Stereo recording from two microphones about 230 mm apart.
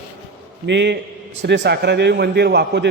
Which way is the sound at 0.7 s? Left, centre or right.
Right.